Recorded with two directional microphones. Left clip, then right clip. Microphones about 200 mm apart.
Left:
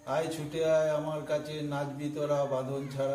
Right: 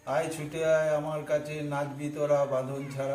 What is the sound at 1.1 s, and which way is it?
A man's voice, 15° left (ahead or behind).